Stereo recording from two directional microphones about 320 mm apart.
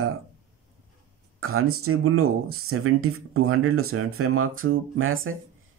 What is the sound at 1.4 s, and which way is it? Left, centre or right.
Speech, right.